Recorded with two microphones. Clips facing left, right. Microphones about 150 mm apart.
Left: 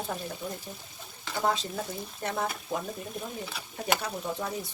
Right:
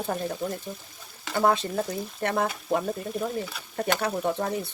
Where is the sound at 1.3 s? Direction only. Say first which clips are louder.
Right 6 dB; 60° right (ahead or behind).